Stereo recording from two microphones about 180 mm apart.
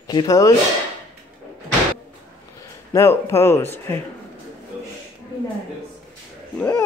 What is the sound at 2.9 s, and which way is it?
Speech, 15° left (ahead or behind).